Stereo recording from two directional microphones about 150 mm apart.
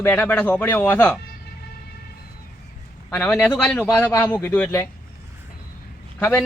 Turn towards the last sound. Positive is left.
turn(degrees=10)  # may be behind; listen again after turning